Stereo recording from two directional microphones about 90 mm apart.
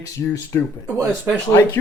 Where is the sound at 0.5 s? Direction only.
20° left (ahead or behind).